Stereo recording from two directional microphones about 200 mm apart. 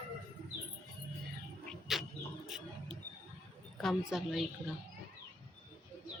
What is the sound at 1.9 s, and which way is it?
Bird, centre (ahead or behind).